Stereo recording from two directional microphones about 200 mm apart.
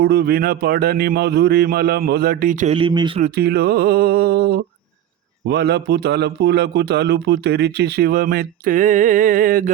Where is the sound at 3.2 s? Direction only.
50° right (ahead or behind).